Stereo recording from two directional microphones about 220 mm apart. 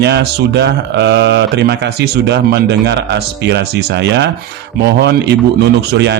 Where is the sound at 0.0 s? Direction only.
50° right (ahead or behind).